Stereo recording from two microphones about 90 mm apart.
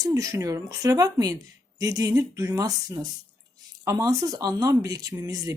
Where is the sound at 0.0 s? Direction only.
40° right (ahead or behind).